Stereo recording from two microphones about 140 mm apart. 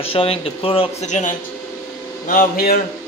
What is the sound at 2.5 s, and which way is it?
Speech, 90° left.